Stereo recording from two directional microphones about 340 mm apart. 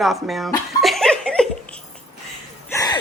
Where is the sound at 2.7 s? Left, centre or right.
Centre.